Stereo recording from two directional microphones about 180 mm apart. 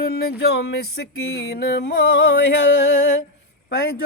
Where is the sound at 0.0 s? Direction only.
60° left (ahead or behind).